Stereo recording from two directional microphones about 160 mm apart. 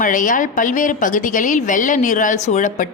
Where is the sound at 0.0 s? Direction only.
55° left (ahead or behind).